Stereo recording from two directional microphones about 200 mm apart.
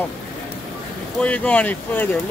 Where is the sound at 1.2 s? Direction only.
5° left (ahead or behind).